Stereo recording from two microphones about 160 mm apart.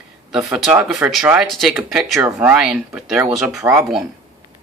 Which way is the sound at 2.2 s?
15° right (ahead or behind).